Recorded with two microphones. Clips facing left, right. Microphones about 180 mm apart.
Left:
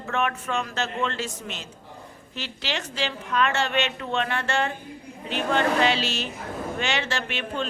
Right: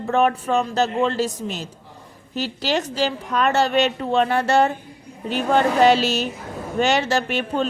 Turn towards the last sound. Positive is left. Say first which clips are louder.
# right 7 dB
turn(degrees=-40)  # may be behind; listen again after turning